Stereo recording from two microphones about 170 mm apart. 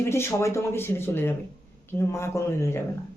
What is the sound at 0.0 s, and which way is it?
Speech, 15° left (ahead or behind).